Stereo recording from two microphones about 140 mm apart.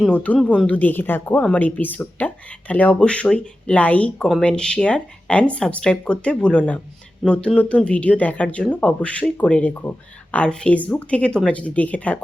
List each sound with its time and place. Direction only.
0.0 s speech: 10° left (ahead or behind)